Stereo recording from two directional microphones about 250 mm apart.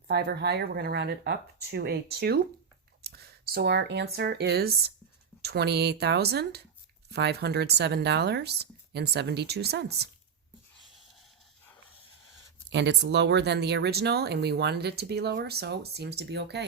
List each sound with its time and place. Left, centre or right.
0.1 s speech: right
12.7 s speech: right